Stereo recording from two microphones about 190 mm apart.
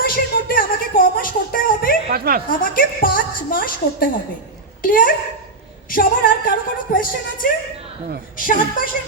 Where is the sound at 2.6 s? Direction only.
50° left (ahead or behind).